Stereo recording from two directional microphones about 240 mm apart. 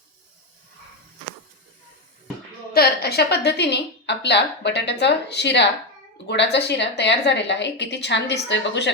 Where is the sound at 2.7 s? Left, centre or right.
Left.